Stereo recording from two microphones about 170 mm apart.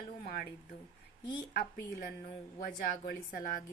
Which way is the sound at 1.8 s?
65° left (ahead or behind).